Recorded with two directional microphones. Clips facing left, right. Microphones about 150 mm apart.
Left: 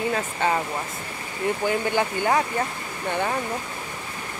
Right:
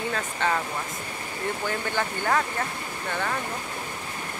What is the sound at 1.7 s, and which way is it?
Speech, 15° left (ahead or behind).